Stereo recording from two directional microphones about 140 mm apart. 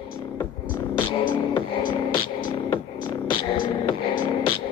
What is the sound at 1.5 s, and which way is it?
Music, 35° left (ahead or behind).